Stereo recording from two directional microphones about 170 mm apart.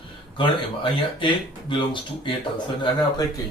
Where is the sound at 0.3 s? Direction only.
30° left (ahead or behind).